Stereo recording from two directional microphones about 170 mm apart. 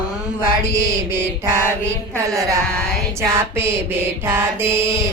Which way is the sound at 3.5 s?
15° right (ahead or behind).